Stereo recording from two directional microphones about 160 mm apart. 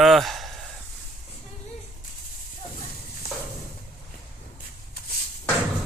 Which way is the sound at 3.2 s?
70° left (ahead or behind).